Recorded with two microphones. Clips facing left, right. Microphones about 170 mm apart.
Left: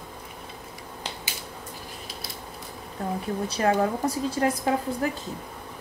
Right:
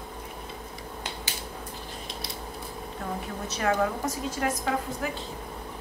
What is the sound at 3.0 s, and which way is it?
A woman's voice, 40° left (ahead or behind).